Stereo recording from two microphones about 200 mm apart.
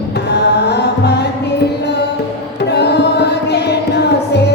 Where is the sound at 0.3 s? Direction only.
55° left (ahead or behind).